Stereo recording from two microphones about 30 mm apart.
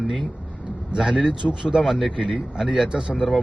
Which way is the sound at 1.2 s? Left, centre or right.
Right.